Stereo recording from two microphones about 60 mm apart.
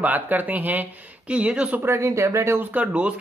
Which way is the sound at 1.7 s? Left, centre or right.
Right.